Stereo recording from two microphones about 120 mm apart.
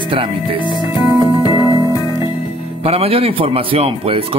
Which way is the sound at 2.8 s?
55° right (ahead or behind).